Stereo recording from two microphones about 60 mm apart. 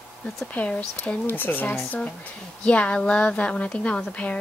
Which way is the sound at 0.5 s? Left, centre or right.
Left.